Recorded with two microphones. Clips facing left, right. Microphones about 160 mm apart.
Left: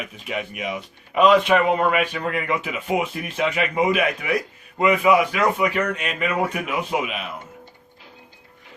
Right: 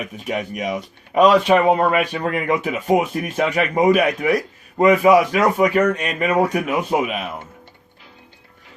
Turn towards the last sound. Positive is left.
turn(degrees=-45)  # may be behind; listen again after turning